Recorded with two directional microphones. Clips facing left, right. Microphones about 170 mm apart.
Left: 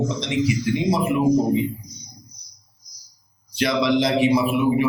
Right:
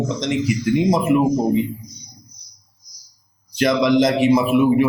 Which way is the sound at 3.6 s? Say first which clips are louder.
Right 4 dB; 45° right (ahead or behind).